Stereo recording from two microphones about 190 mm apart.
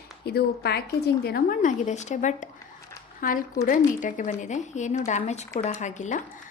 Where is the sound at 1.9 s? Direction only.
40° left (ahead or behind).